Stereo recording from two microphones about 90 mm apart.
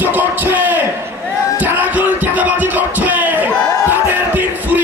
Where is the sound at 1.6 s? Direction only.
20° right (ahead or behind).